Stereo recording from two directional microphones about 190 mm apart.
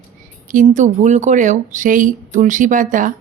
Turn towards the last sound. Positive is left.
turn(degrees=-45)  # may be behind; listen again after turning